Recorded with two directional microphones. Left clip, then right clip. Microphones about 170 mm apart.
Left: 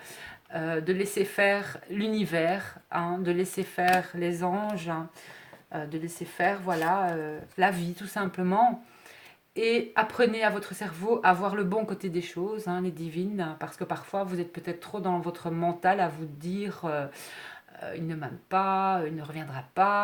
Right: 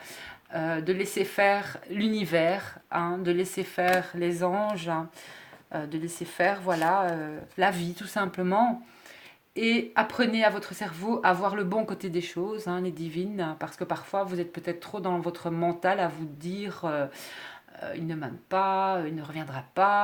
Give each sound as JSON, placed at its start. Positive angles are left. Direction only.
{"t": 0.2, "sound": "speech", "side_deg": -30}
{"t": 6.7, "sound": "speech", "side_deg": -20}
{"t": 6.9, "sound": "speech", "side_deg": -30}